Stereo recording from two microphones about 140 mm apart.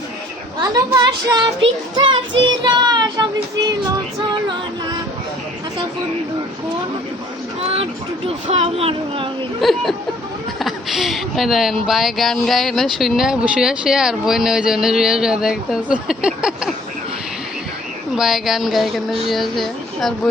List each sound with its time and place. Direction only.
0.9 s speech: 30° right (ahead or behind)
7.6 s speech: 45° right (ahead or behind)
9.6 s speech: centre (ahead or behind)
18.2 s speech: centre (ahead or behind)